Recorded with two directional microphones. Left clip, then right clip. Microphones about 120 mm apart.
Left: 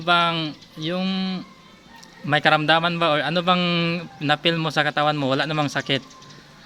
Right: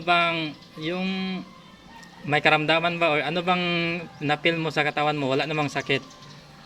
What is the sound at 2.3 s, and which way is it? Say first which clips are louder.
Speech: left 3 dB; 90° left.